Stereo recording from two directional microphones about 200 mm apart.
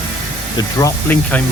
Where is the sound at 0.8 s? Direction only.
10° left (ahead or behind).